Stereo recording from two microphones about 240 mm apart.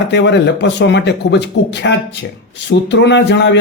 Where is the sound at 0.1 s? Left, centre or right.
Left.